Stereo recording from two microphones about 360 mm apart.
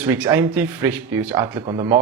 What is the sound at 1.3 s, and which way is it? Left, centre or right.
Speech, centre.